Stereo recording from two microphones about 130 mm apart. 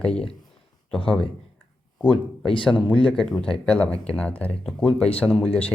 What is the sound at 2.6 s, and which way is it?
Speech, 10° left (ahead or behind).